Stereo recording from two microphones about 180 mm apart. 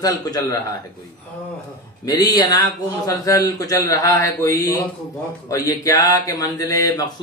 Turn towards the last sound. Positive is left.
turn(degrees=20)  # may be behind; listen again after turning